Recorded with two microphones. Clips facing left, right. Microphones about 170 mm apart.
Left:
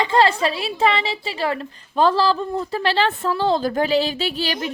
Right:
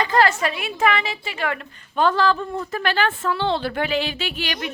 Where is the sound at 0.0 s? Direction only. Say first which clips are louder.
Left 2 dB; 25° left (ahead or behind).